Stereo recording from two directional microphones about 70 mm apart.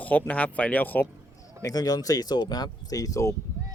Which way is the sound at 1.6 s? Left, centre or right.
Left.